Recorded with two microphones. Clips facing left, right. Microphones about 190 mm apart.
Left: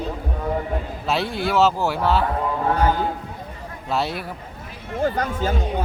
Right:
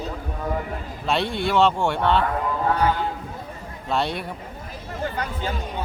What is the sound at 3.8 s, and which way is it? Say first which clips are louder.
Speech: even; centre (ahead or behind).